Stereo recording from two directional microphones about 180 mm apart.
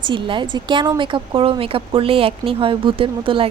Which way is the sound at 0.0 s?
25° right (ahead or behind).